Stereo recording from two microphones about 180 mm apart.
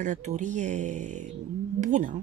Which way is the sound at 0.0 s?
40° right (ahead or behind).